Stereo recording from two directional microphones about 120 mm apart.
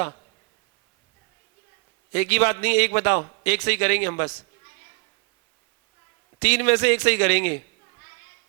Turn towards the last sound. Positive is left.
turn(degrees=25)  # may be behind; listen again after turning